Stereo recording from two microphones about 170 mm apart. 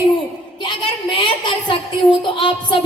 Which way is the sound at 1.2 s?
30° left (ahead or behind).